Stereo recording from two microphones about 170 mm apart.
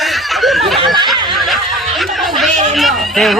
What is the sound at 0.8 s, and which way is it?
Snicker, 25° right (ahead or behind).